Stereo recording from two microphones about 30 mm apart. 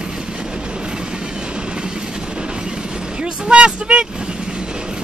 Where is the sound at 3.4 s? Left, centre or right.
Right.